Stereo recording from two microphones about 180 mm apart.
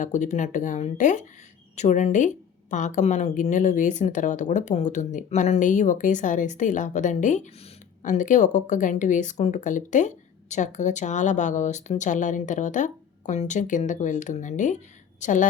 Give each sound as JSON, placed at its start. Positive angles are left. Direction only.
{"t": 0.0, "sound": "a woman's voice", "side_deg": 40}